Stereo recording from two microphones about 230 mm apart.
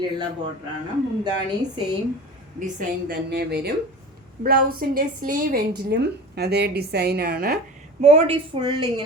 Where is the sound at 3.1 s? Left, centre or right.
Right.